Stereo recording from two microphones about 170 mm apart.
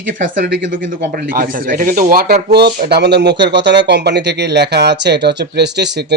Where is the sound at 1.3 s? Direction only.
55° right (ahead or behind).